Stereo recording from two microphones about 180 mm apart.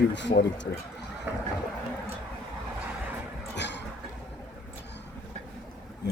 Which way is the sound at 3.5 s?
75° left (ahead or behind).